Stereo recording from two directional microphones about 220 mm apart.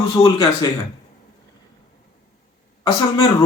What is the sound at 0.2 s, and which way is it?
Speech, 25° left (ahead or behind).